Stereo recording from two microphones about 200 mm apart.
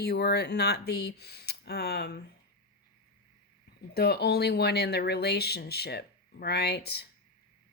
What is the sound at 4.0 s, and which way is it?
Speech, 55° left (ahead or behind).